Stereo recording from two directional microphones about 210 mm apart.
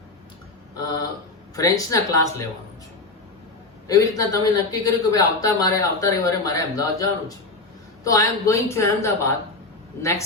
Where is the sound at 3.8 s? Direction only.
15° left (ahead or behind).